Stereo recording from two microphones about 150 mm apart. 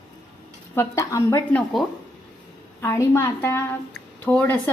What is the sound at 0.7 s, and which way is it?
Speech, 20° left (ahead or behind).